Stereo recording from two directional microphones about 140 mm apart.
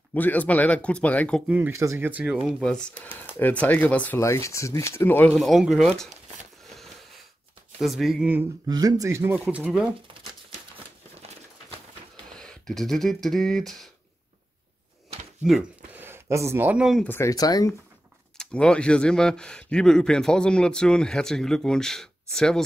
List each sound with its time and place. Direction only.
0.1 s speech: 10° left (ahead or behind)
1.7 s speech: 20° right (ahead or behind)
2.4 s speech: 5° left (ahead or behind)
4.2 s speech: 20° left (ahead or behind)
5.3 s speech: centre (ahead or behind)
6.7 s a sound: centre (ahead or behind)
7.8 s speech: centre (ahead or behind)
8.6 s speech: 30° right (ahead or behind); by 9.8 s 5° right (ahead or behind)
12.4 s speech: 5° left (ahead or behind)
15.9 s speech: 15° right (ahead or behind)
17.0 s speech: 15° left (ahead or behind)
18.4 s speech: 5° left (ahead or behind)